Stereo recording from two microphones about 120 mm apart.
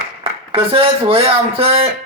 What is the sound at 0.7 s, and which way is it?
Speech, 50° right (ahead or behind).